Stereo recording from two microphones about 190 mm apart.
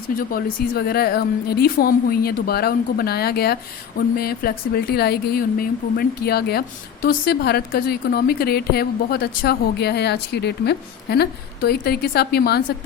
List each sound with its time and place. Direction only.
0.2 s a woman's voice: 50° left (ahead or behind)